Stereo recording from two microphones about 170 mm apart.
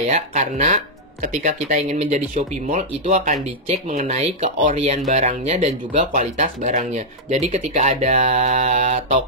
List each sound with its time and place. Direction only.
0.0 s speech: 45° right (ahead or behind)